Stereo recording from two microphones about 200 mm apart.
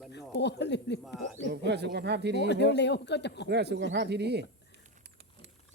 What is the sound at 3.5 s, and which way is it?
Speech, 55° right (ahead or behind).